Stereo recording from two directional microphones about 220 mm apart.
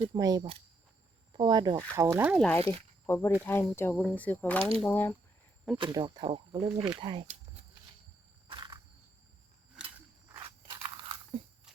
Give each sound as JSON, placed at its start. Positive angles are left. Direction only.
{"t": 0.1, "sound": "speech", "side_deg": -15}
{"t": 2.6, "sound": "speech", "side_deg": 10}
{"t": 5.7, "sound": "speech", "side_deg": -20}
{"t": 7.0, "sound": "a sound", "side_deg": -20}
{"t": 10.3, "sound": "crunch", "side_deg": -25}